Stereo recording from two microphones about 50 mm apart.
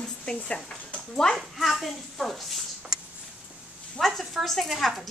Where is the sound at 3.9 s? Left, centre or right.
Centre.